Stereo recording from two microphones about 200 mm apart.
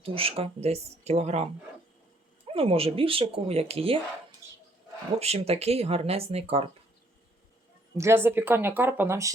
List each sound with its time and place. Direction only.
0.0 s speech: 30° right (ahead or behind)
2.5 s speech: 30° right (ahead or behind)
7.9 s speech: 15° right (ahead or behind)